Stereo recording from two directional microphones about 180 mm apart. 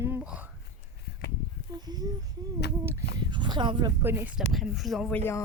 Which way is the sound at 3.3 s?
25° right (ahead or behind).